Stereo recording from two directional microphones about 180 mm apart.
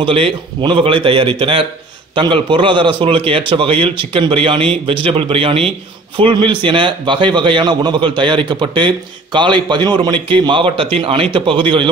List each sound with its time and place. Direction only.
0.0 s a man's voice: 30° right (ahead or behind)